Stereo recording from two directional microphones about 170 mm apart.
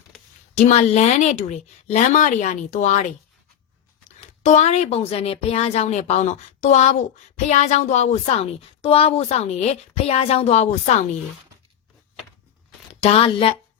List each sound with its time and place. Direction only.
0.5 s a woman's voice: 40° left (ahead or behind)
4.4 s a woman's voice: 40° left (ahead or behind)
12.9 s speech: 35° left (ahead or behind)